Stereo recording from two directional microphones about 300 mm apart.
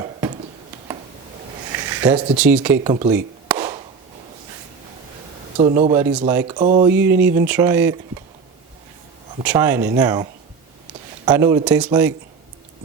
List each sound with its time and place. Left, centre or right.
0.0 s a sound: centre
1.7 s a sound: centre
2.4 s speech: centre
2.8 s speech: centre
3.5 s a sound: centre
5.5 s speech: centre
6.8 s speech: centre
9.4 s speech: centre
11.3 s speech: centre